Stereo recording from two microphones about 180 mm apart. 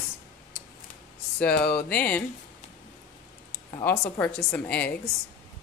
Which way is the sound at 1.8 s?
10° left (ahead or behind).